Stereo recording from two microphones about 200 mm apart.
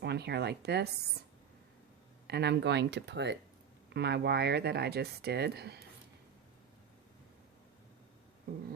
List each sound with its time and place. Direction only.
0.0 s speech: 55° right (ahead or behind)
2.2 s speech: 55° right (ahead or behind)